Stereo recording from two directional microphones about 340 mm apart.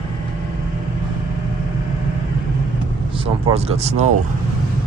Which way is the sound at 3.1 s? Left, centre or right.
Centre.